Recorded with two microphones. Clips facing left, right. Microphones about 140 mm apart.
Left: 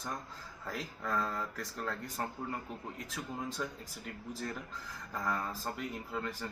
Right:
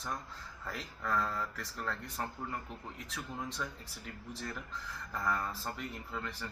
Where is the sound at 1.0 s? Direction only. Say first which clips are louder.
Right 1 dB; 40° left (ahead or behind).